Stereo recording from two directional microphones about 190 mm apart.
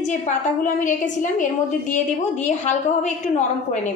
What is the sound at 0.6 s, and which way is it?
Speech, 45° left (ahead or behind).